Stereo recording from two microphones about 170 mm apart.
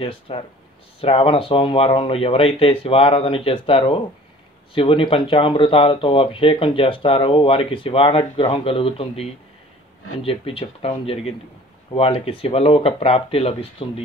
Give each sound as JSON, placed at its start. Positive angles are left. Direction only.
{"t": 0.0, "sound": "speech", "side_deg": 35}